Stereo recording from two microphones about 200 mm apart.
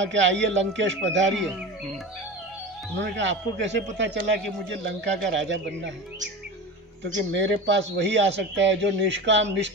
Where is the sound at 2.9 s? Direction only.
65° right (ahead or behind).